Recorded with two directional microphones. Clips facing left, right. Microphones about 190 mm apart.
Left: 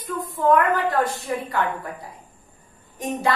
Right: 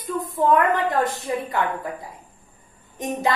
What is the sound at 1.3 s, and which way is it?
Speech, 20° right (ahead or behind).